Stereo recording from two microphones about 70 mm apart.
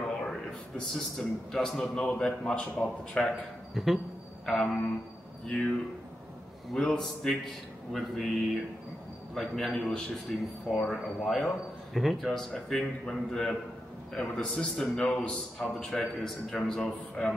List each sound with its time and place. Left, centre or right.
0.0 s a man's voice: centre
3.7 s a man's voice: centre
6.7 s a man's voice: centre